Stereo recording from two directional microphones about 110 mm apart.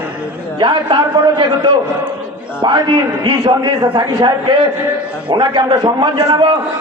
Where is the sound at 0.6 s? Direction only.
45° right (ahead or behind).